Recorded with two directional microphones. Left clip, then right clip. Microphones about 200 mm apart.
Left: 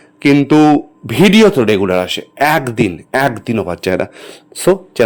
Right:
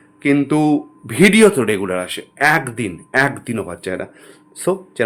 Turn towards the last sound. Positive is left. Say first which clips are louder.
# left 7 dB
turn(degrees=40)  # may be behind; listen again after turning